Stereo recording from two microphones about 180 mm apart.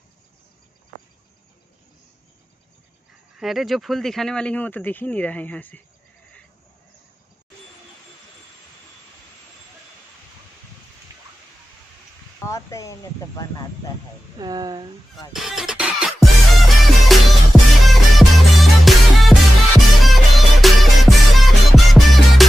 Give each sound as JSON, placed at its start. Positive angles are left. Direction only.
{"t": 3.3, "sound": "speech", "side_deg": 0}
{"t": 12.4, "sound": "a sound", "side_deg": 15}
{"t": 14.4, "sound": "speech", "side_deg": -20}
{"t": 15.3, "sound": "music", "side_deg": 0}